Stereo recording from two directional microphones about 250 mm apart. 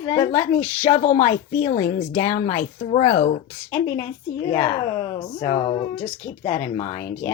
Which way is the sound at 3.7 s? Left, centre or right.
Centre.